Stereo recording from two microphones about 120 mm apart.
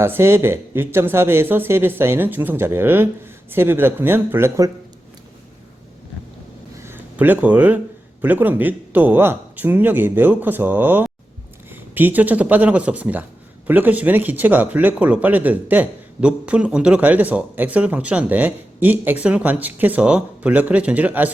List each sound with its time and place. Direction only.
0.0 s speech: 20° right (ahead or behind)
6.7 s a sound: 20° right (ahead or behind)
8.2 s speech: 15° right (ahead or behind)